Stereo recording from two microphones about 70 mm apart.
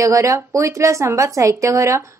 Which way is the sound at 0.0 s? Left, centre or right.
Right.